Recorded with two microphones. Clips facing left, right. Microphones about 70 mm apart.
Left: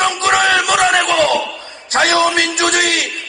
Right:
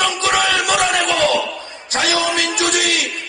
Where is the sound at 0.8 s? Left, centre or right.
Left.